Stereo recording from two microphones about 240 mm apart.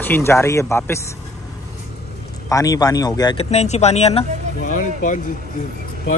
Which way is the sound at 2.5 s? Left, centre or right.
Centre.